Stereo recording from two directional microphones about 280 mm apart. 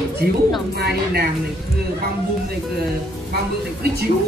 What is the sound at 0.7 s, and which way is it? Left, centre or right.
Speech, right.